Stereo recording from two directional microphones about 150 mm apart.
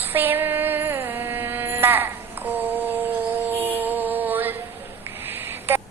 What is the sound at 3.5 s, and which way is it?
Music, 10° right (ahead or behind).